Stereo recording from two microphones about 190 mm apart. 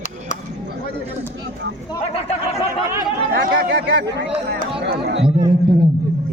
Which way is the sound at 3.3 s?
55° right (ahead or behind).